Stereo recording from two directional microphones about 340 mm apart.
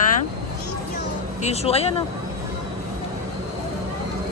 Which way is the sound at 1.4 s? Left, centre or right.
Centre.